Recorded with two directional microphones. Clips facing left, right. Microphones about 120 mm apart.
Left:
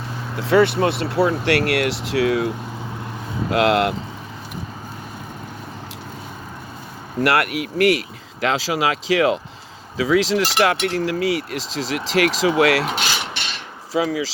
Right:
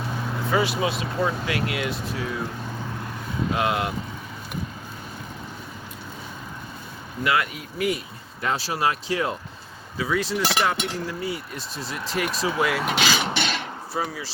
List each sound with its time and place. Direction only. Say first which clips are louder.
0.3 s speech: left 8 dB; 80° left
3.5 s speech: left 8 dB; 80° left
7.2 s speech: left 6 dB; 70° left (ahead or behind); by 10.5 s 90° left
10.6 s speech: left 6 dB; 80° left
13.9 s speech: left 9 dB; 90° left